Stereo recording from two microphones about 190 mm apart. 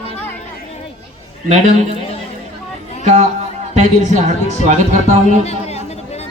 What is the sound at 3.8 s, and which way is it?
Speech, 40° right (ahead or behind).